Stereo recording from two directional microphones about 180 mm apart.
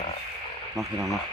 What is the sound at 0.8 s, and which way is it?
Speech, centre (ahead or behind).